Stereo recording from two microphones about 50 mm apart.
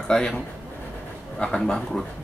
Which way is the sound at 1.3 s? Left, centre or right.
Centre.